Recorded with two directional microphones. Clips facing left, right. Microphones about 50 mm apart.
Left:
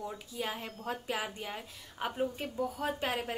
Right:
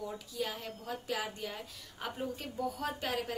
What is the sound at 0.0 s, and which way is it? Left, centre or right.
A woman's voice, left.